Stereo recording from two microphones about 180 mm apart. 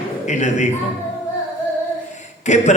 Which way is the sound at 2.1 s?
40° left (ahead or behind).